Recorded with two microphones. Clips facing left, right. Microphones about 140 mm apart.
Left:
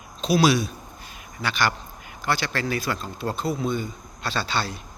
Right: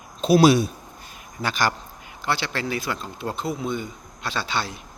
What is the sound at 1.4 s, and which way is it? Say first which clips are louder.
Speech: right 1 dB; 40° right (ahead or behind).